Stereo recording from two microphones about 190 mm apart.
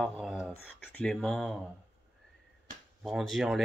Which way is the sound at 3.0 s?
Centre (ahead or behind).